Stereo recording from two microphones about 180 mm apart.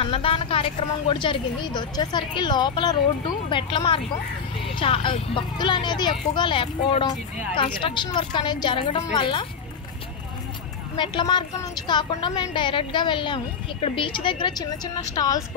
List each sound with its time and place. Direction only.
0.0 s a woman's voice: 30° left (ahead or behind)
11.0 s a woman's voice: 25° left (ahead or behind)